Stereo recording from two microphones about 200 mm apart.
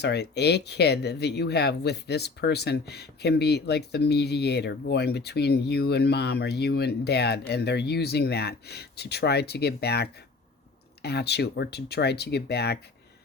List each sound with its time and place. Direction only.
0.0 s speech: 55° left (ahead or behind)